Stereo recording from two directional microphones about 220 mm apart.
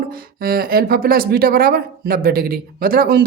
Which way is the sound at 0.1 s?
45° right (ahead or behind).